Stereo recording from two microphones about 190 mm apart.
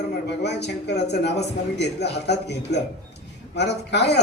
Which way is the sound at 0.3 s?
60° left (ahead or behind).